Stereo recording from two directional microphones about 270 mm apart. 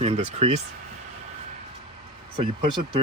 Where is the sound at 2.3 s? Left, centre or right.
Centre.